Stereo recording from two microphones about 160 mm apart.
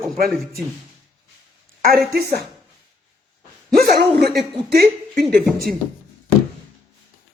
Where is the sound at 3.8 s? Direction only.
75° right (ahead or behind).